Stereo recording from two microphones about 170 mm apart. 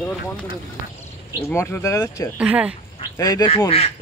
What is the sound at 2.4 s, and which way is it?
Speech, 5° right (ahead or behind).